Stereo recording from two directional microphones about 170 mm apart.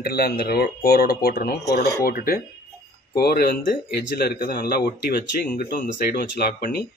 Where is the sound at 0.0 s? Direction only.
65° left (ahead or behind).